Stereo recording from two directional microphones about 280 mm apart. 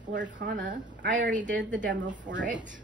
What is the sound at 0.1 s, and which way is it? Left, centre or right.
A woman's voice, right.